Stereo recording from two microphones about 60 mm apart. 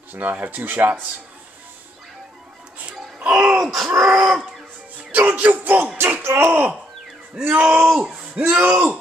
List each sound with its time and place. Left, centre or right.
0.1 s speech: right
2.9 s a sound: centre
3.5 s speech: centre
5.1 s speech: right
6.2 s speech: right
7.4 s speech: right
7.7 s speech: right